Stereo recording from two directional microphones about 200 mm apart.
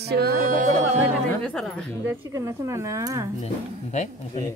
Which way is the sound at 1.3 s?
5° left (ahead or behind).